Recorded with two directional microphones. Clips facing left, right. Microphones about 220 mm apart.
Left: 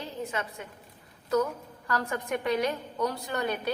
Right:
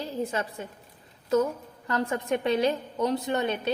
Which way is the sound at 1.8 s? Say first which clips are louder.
Right 4 dB; 25° right (ahead or behind).